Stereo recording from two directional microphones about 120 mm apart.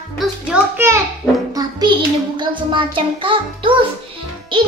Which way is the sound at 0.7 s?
20° right (ahead or behind).